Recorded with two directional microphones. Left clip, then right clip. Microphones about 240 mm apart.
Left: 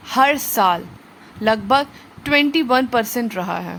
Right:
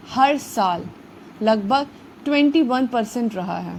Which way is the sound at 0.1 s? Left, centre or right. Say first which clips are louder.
Left 2 dB; centre.